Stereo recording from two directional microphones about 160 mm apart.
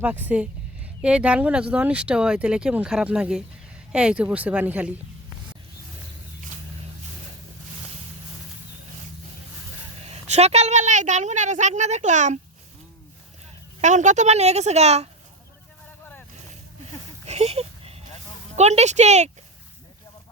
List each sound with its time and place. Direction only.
0.0 s speech: 10° right (ahead or behind)
10.0 s a woman's voice: 45° right (ahead or behind)
13.8 s a woman's voice: 50° right (ahead or behind)
16.8 s a sound: 45° right (ahead or behind)
18.5 s a woman's voice: 45° right (ahead or behind)